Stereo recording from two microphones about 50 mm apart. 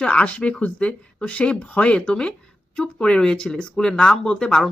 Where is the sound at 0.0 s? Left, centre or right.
Left.